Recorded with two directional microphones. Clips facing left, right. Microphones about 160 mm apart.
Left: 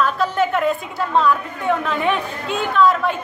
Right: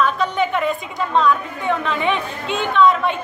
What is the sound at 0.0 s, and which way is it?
Speech, 5° left (ahead or behind).